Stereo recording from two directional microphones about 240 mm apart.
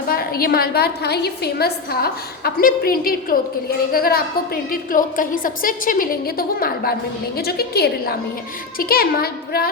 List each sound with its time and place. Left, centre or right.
0.1 s a woman's voice: left